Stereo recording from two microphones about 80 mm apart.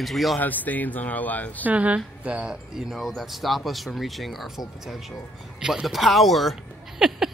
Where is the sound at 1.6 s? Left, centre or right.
Centre.